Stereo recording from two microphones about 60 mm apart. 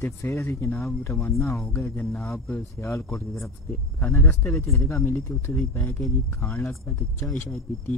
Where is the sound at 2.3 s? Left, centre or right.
Left.